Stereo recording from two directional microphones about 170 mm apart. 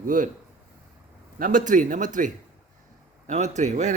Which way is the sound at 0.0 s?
50° right (ahead or behind).